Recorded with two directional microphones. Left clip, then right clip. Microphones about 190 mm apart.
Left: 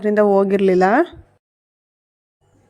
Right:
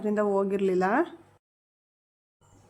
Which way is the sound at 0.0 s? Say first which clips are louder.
Left 11 dB; 40° left (ahead or behind).